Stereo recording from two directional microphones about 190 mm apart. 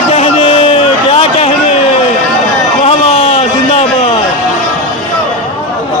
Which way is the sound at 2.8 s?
35° left (ahead or behind).